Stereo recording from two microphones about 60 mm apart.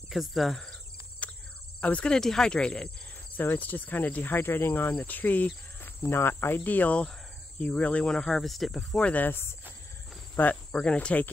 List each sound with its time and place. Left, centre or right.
0.1 s speech: centre
1.2 s cricket: left
1.8 s speech: left
2.1 s speech: centre
3.3 s cricket: left
6.0 s speech: left; by 8.8 s centre
9.1 s cricket: left
10.7 s speech: centre